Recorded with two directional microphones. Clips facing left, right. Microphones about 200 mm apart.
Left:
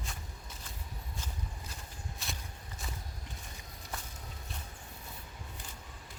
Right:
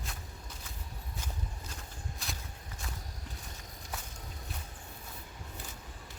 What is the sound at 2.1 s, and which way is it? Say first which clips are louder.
Walk: even; centre (ahead or behind).